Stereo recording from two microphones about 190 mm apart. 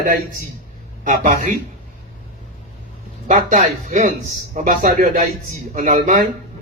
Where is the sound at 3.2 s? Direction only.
40° right (ahead or behind).